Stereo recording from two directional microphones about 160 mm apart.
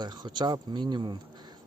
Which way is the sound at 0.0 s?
25° right (ahead or behind).